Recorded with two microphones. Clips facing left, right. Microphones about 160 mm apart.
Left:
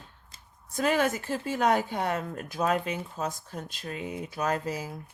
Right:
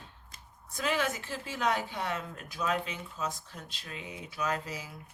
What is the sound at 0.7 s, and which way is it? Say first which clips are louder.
Speech: left 6 dB; 50° left (ahead or behind).